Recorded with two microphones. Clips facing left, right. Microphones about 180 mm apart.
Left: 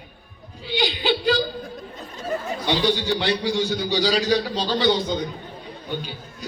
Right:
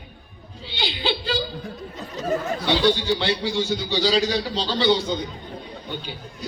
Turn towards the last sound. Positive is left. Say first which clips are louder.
# left 1 dB
turn(degrees=10)  # may be behind; listen again after turning